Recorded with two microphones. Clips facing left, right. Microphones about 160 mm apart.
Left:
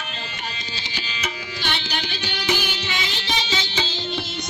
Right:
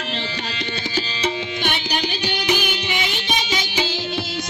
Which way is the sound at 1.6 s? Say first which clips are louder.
Right 3 dB; 15° right (ahead or behind).